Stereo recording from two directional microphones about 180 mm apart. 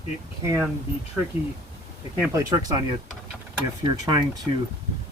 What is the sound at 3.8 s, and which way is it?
Speech, 25° right (ahead or behind).